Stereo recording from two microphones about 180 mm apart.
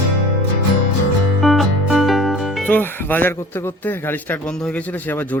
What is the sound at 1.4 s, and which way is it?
Speech, centre (ahead or behind).